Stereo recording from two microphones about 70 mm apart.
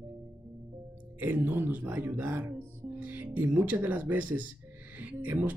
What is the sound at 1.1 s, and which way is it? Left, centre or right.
Speech, right.